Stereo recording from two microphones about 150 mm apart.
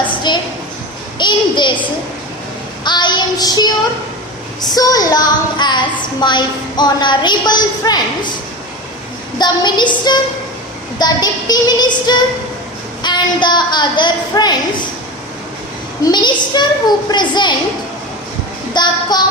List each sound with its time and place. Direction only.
0.3 s a sound: 30° left (ahead or behind)
2.8 s child singing: 30° left (ahead or behind)
4.6 s a woman's voice: 25° left (ahead or behind)
9.4 s a woman's voice: 30° left (ahead or behind)
16.0 s a woman's voice: 30° left (ahead or behind)
18.7 s a woman's voice: 30° left (ahead or behind)